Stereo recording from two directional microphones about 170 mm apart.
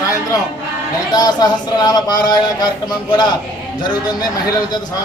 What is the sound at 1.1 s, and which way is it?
Speech, 25° left (ahead or behind).